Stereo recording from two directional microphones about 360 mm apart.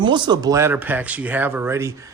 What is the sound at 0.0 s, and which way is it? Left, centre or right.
Speech, centre.